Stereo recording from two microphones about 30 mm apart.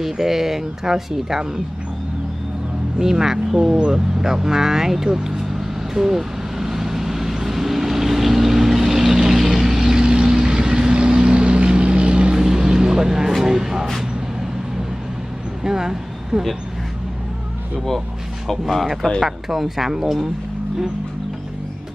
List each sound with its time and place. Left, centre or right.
0.0 s speech: centre
3.0 s speech: centre
3.9 s vehicle: centre
10.0 s vehicle: right
12.4 s vehicle: right
13.4 s music: centre
15.6 s vehicle: centre
18.5 s speech: centre
19.2 s speech: centre